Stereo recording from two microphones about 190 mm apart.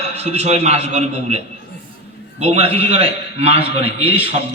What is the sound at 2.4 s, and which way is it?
A man's voice, 35° right (ahead or behind).